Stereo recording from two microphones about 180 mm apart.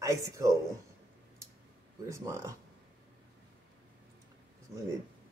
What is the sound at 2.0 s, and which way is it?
Speech, 15° right (ahead or behind).